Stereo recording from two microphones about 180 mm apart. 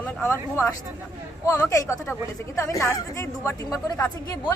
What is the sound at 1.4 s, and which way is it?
Speech, 15° left (ahead or behind).